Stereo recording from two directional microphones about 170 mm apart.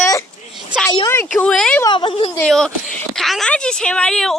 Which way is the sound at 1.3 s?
5° left (ahead or behind).